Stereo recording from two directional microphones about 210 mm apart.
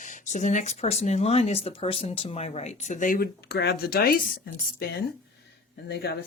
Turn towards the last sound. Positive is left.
turn(degrees=50)  # may be behind; listen again after turning